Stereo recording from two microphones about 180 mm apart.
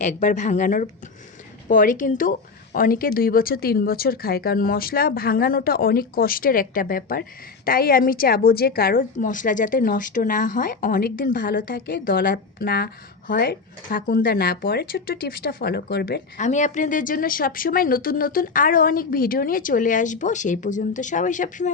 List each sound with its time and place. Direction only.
0.0 s speech: 45° left (ahead or behind); by 16.2 s 65° left (ahead or behind)
16.4 s speech: 45° left (ahead or behind)